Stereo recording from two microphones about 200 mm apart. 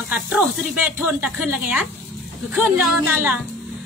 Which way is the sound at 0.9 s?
5° right (ahead or behind).